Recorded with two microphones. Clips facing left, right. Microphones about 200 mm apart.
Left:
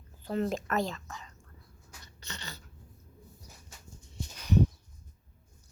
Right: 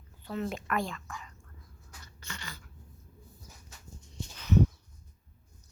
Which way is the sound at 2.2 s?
20° left (ahead or behind).